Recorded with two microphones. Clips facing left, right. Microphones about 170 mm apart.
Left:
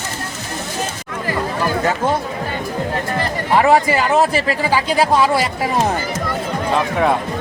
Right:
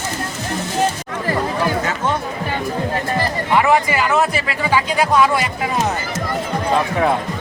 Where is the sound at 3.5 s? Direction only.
35° left (ahead or behind).